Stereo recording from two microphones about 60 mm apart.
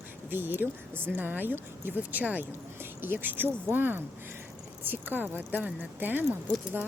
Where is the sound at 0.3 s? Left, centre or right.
Right.